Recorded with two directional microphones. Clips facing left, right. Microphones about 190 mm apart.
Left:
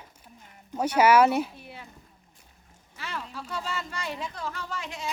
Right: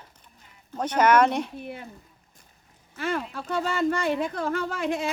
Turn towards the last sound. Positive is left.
turn(degrees=-55)  # may be behind; listen again after turning